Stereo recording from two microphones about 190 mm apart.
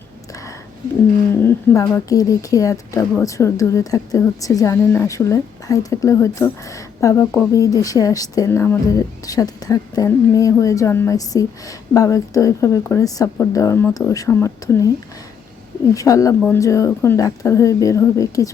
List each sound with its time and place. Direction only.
1.4 s speech: 15° left (ahead or behind)
16.0 s speech: 15° left (ahead or behind)